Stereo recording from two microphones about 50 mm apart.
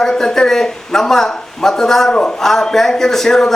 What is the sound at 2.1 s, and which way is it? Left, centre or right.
Speech, centre.